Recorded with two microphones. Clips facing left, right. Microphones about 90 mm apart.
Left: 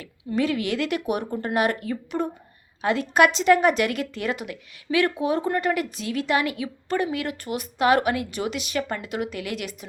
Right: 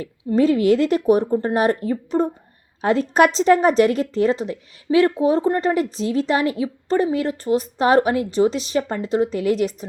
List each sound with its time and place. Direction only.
0.0 s a woman's voice: 35° right (ahead or behind)